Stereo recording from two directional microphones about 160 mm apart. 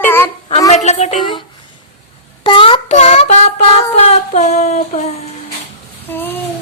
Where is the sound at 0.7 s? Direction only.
45° left (ahead or behind).